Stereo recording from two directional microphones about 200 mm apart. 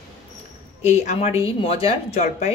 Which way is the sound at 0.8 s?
35° left (ahead or behind).